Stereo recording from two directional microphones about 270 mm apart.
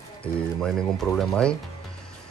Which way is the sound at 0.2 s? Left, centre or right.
Centre.